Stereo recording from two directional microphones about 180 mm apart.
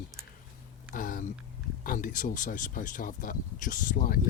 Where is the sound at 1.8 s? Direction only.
50° left (ahead or behind).